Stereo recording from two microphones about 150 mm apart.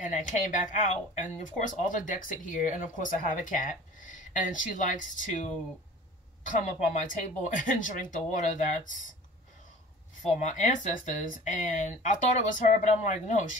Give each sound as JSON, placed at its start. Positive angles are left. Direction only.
{"t": 0.0, "sound": "speech", "side_deg": 55}
{"t": 10.4, "sound": "speech", "side_deg": 55}